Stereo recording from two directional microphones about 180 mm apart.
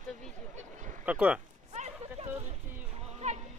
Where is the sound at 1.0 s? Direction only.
5° right (ahead or behind).